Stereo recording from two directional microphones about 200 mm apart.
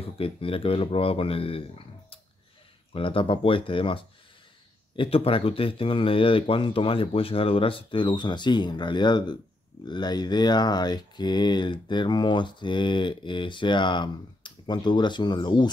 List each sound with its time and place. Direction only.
0.2 s speech: 25° left (ahead or behind)